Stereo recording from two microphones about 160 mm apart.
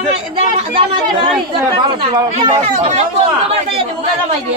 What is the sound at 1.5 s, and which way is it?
Speech, 35° right (ahead or behind).